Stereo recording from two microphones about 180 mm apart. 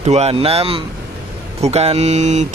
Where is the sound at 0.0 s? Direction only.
35° right (ahead or behind).